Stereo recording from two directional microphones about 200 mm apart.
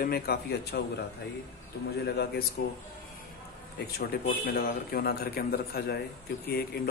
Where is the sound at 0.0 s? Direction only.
50° left (ahead or behind).